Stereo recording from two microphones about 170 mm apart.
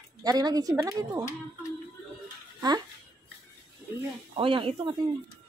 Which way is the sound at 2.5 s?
20° right (ahead or behind).